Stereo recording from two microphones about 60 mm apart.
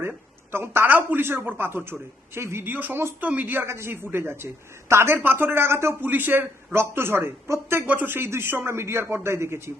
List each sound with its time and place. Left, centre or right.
0.5 s speech: right
2.7 s speech: right
6.0 s a man's voice: right